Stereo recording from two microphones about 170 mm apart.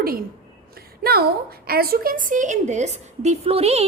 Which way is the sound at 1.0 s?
65° right (ahead or behind).